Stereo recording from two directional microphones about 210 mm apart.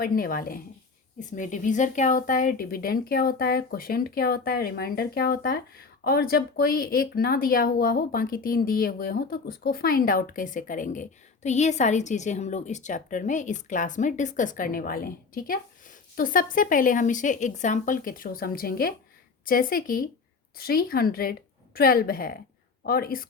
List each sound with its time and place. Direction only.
0.0 s speech: 40° left (ahead or behind)